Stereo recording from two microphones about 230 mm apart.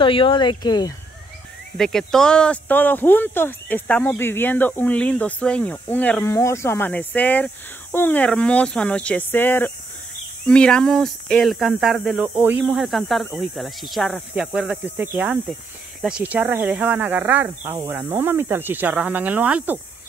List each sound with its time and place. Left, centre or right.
0.0 s speech: left
1.8 s speech: centre